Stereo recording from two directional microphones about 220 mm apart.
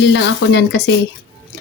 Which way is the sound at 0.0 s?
55° left (ahead or behind).